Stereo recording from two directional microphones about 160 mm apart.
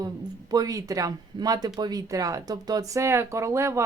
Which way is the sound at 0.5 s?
20° right (ahead or behind).